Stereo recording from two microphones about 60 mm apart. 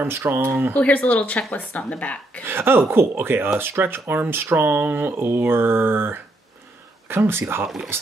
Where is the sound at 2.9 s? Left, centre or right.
Right.